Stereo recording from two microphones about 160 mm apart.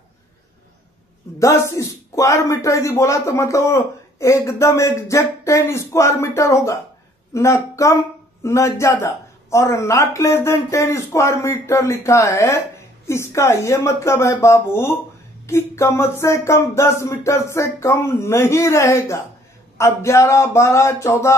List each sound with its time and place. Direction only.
1.4 s speech: 20° left (ahead or behind)